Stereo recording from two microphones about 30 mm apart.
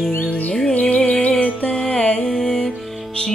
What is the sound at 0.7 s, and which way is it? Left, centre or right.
Music, left.